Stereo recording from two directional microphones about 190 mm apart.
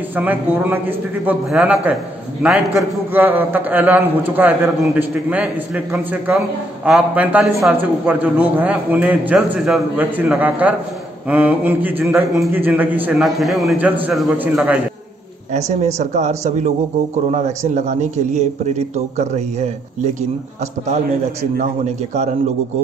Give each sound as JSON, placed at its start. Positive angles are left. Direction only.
{"t": 0.1, "sound": "a man's voice", "side_deg": -10}
{"t": 15.5, "sound": "a man's voice", "side_deg": -35}